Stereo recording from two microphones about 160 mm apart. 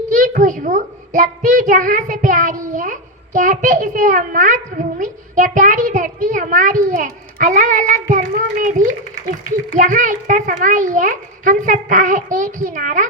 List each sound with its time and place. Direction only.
0.1 s a child's voice: 55° right (ahead or behind)